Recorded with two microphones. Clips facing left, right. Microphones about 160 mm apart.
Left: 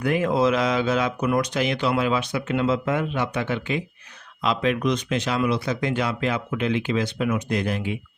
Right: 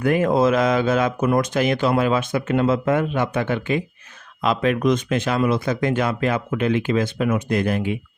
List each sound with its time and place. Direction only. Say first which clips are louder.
0.0 s speech: right 3 dB; 50° right (ahead or behind)